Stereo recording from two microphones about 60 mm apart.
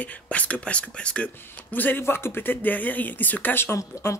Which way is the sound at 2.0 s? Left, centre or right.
Left.